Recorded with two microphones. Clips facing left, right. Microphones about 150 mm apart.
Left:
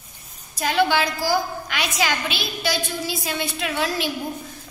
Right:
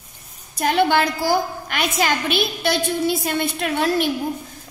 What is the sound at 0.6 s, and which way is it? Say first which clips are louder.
A woman's voice: right 3 dB; 55° right (ahead or behind).